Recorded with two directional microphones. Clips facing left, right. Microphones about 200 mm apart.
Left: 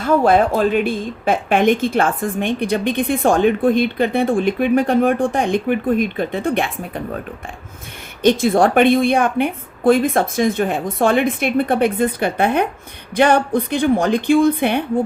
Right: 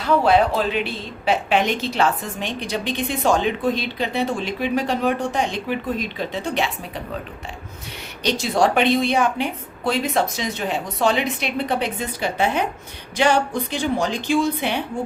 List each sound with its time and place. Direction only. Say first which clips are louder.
0.0 s speech: left 3 dB; 50° left (ahead or behind)
8.2 s a woman's voice: left 6 dB; 50° left (ahead or behind)